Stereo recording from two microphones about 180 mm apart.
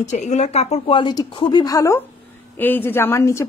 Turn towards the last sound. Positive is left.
turn(degrees=15)  # may be behind; listen again after turning